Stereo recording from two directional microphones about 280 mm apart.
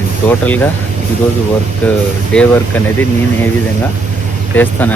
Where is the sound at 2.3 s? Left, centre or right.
Centre.